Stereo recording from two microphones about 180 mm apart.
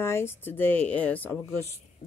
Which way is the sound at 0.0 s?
15° left (ahead or behind).